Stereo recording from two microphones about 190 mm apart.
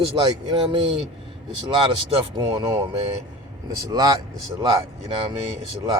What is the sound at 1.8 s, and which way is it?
A man's voice, 25° right (ahead or behind).